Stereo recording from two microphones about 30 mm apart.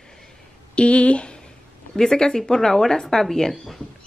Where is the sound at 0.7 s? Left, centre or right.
Left.